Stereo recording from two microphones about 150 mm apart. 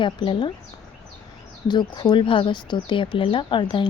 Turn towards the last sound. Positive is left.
turn(degrees=30)  # may be behind; listen again after turning